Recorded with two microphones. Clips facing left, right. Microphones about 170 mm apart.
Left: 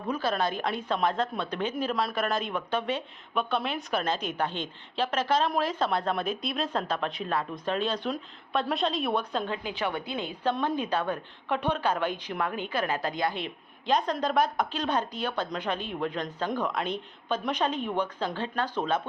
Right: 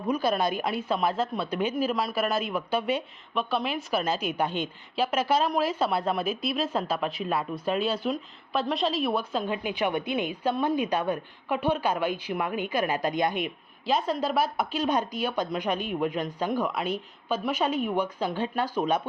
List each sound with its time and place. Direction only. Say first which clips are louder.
0.1 s speech: right 3 dB; 15° right (ahead or behind)
9.6 s speech: right 4 dB; 15° right (ahead or behind)
13.8 s speech: even; 5° right (ahead or behind)